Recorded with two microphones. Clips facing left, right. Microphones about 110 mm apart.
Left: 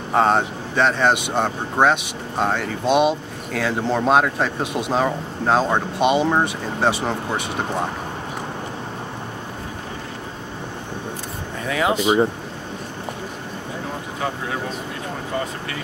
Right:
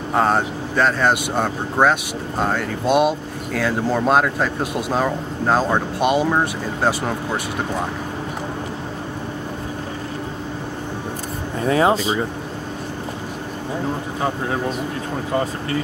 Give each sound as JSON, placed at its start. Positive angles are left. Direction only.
{"t": 0.1, "sound": "speech", "side_deg": 0}
{"t": 11.6, "sound": "speech", "side_deg": -35}